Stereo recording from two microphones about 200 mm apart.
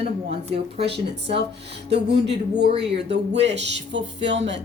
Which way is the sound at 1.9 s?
55° right (ahead or behind).